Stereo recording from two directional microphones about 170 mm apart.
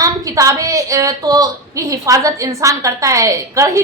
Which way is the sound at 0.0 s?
20° right (ahead or behind).